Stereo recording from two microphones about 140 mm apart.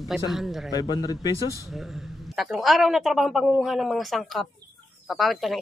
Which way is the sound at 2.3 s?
Centre (ahead or behind).